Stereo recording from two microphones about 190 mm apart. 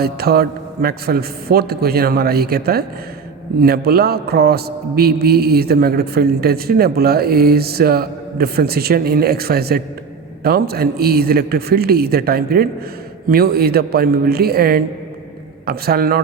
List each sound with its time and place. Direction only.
0.0 s a man's voice: 55° right (ahead or behind)